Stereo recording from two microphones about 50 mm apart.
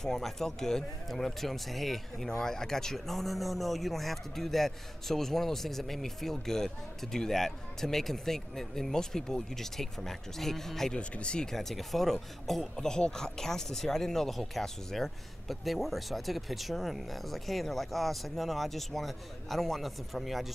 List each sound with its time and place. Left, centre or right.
0.0 s speech: centre
11.0 s speech: left
11.5 s speech: centre